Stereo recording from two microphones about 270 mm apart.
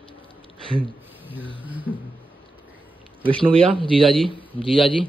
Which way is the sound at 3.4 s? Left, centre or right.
Centre.